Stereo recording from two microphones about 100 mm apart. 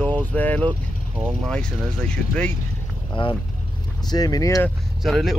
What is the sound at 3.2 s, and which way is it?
Speech, 55° left (ahead or behind).